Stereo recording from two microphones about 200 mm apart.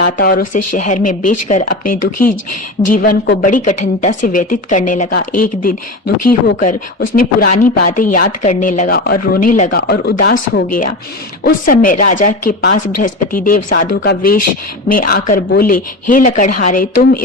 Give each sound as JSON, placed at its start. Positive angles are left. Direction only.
{"t": 0.0, "sound": "a woman's voice", "side_deg": 45}
{"t": 9.8, "sound": "speech", "side_deg": 55}